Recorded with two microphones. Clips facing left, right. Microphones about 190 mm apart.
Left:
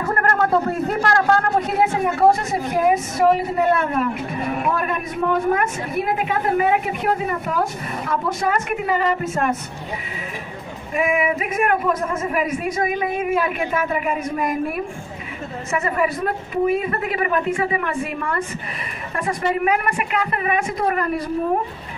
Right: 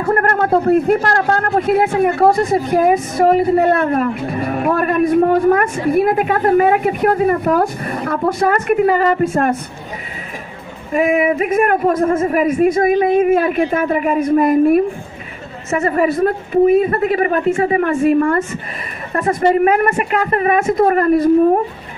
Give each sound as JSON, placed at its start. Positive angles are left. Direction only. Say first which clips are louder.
{"t": 0.1, "sound": "a man's voice", "louder": "right 5 dB", "side_deg": -50}
{"t": 10.9, "sound": "a man's voice", "louder": "right 6 dB", "side_deg": -45}
{"t": 15.8, "sound": "a man's voice", "louder": "right 8 dB", "side_deg": -40}